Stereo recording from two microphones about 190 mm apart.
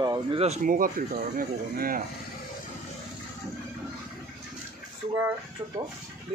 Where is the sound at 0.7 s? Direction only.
45° right (ahead or behind).